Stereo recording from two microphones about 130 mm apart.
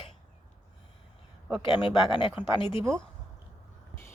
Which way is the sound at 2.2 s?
40° left (ahead or behind).